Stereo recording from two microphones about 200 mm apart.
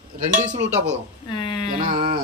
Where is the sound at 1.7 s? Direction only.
45° right (ahead or behind).